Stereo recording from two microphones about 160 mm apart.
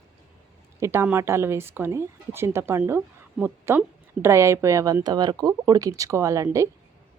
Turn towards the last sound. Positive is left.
turn(degrees=-20)  # may be behind; listen again after turning